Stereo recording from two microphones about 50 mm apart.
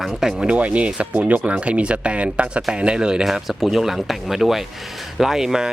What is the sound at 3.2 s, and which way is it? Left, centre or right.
Speech, centre.